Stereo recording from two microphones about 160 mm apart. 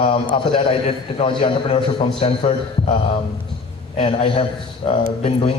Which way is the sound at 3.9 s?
35° left (ahead or behind).